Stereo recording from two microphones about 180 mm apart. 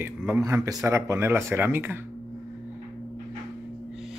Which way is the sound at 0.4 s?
20° right (ahead or behind).